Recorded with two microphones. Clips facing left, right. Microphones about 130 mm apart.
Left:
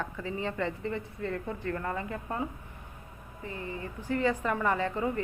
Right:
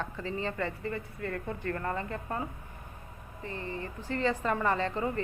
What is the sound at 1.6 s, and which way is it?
Speech, 10° left (ahead or behind).